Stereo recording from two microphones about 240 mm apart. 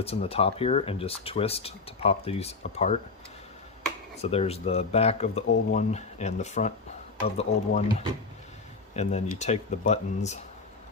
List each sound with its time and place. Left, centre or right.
0.0 s speech: left
4.2 s speech: left
9.0 s speech: left